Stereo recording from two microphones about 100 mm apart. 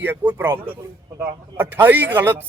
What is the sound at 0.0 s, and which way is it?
A man's voice, 20° right (ahead or behind).